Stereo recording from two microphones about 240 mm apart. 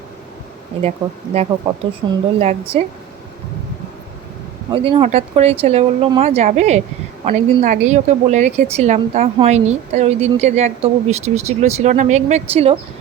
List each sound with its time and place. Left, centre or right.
0.8 s a woman's voice: right
4.7 s a woman's voice: right